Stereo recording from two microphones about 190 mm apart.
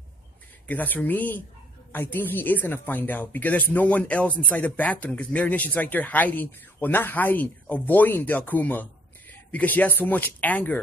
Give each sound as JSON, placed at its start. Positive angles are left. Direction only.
{"t": 0.7, "sound": "speech", "side_deg": 10}